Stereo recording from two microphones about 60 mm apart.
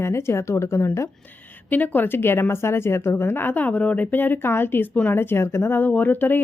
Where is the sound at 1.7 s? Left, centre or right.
Left.